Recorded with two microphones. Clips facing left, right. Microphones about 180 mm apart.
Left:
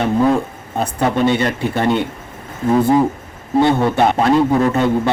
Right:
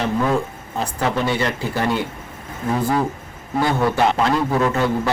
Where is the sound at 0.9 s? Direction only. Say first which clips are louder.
Left 5 dB; 25° left (ahead or behind).